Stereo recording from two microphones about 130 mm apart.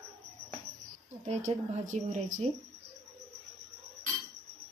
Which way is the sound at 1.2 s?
65° right (ahead or behind).